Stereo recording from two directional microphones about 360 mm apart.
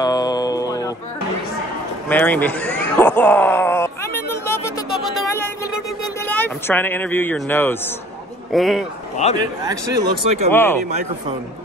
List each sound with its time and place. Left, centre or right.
0.0 s music: centre
2.0 s groan: centre
6.2 s speech: centre
9.2 s speech: centre
9.7 s speech: centre
10.5 s speech: centre